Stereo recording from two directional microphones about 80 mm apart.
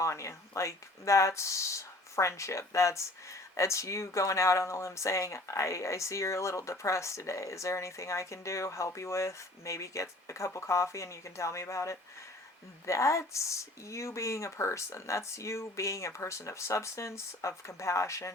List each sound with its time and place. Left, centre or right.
0.0 s speech: left